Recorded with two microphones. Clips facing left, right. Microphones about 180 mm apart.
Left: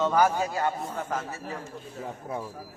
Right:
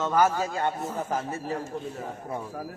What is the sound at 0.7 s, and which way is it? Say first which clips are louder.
Speech: right 2 dB; 5° right (ahead or behind).